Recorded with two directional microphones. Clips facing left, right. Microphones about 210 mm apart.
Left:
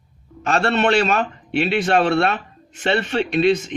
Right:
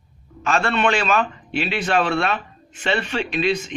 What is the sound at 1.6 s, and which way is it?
A man's voice, 50° left (ahead or behind).